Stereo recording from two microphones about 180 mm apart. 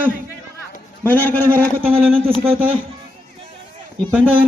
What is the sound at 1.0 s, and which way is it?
Speech, 10° left (ahead or behind).